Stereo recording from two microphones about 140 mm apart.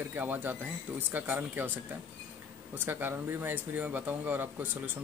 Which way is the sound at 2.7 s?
15° right (ahead or behind).